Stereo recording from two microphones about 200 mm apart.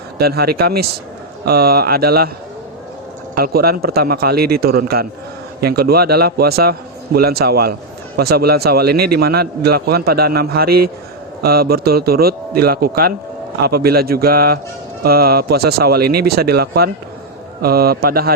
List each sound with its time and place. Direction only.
0.2 s a man's voice: 50° right (ahead or behind)
3.3 s a man's voice: 50° right (ahead or behind)